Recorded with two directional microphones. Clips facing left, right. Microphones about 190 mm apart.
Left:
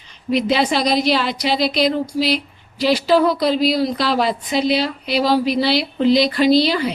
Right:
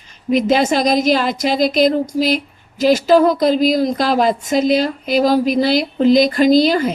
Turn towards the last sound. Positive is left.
turn(degrees=-45)  # may be behind; listen again after turning